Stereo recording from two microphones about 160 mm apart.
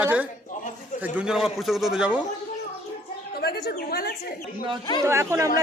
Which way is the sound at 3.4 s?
85° left.